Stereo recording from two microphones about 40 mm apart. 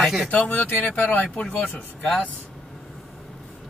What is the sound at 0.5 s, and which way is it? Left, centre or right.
Speech, left.